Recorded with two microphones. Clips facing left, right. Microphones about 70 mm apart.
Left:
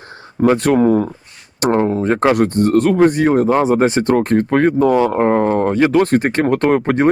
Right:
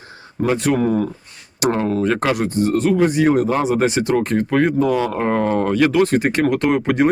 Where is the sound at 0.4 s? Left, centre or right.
Left.